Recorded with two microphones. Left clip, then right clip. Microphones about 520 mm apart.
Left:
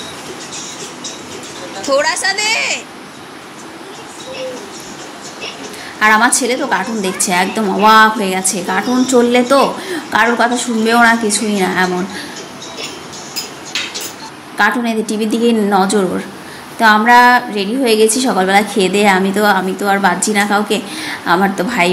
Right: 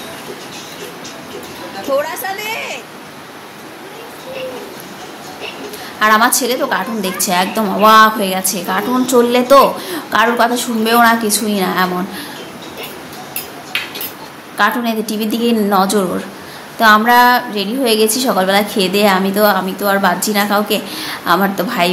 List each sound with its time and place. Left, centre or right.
1.9 s a woman's voice: centre
5.9 s a woman's voice: right
14.6 s a woman's voice: right